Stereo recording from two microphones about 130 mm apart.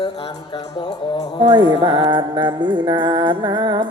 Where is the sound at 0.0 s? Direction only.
40° left (ahead or behind).